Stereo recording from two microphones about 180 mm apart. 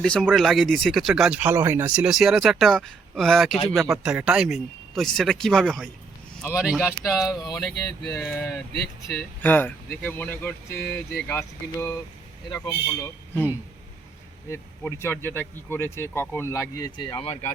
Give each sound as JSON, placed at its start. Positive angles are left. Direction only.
{"t": 0.0, "sound": "speech", "side_deg": 5}
{"t": 7.7, "sound": "speech", "side_deg": 5}
{"t": 14.5, "sound": "speech", "side_deg": 15}
{"t": 17.0, "sound": "speech", "side_deg": 30}